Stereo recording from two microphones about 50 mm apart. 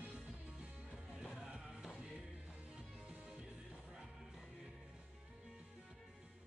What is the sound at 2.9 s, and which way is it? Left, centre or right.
Music, centre.